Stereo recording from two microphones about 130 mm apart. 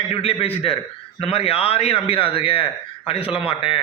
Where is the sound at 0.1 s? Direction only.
45° left (ahead or behind).